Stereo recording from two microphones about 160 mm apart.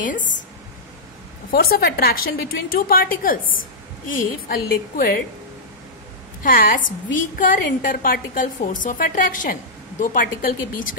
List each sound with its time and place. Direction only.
1.5 s a woman's voice: 70° left (ahead or behind)
6.4 s a woman's voice: 60° left (ahead or behind)